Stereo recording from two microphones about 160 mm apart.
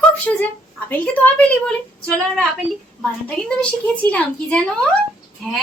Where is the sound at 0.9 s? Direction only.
10° left (ahead or behind).